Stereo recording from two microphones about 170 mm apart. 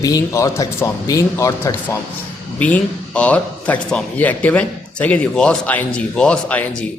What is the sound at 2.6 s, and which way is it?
A man's voice, 10° left (ahead or behind).